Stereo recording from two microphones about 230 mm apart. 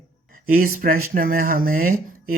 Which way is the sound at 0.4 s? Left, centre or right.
Right.